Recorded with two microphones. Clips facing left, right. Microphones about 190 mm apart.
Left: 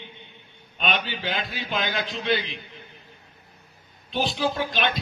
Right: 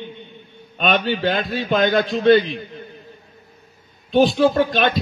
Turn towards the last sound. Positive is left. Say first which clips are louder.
# right 9 dB
turn(degrees=-50)  # may be behind; listen again after turning